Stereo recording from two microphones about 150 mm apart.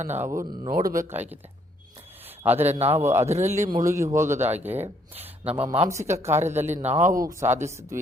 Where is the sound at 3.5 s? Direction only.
20° right (ahead or behind).